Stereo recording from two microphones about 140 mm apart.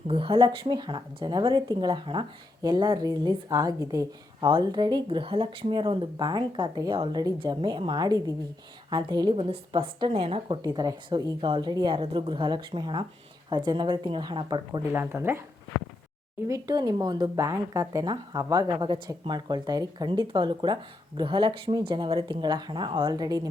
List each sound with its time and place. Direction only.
0.1 s speech: 40° right (ahead or behind)
9.3 s speech: 40° right (ahead or behind)
10.6 s speech: 25° right (ahead or behind)
14.9 s speech: 15° right (ahead or behind)
15.7 s speech: 90° left
16.5 s speech: 25° right (ahead or behind)